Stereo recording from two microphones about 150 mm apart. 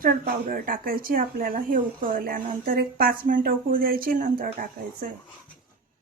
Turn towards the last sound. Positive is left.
turn(degrees=-75)  # may be behind; listen again after turning